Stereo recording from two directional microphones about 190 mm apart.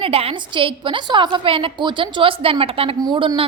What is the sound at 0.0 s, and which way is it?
A woman's voice, 30° right (ahead or behind).